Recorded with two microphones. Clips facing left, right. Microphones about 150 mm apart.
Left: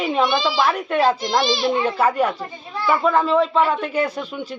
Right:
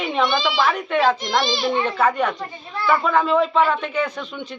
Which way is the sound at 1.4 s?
20° left (ahead or behind).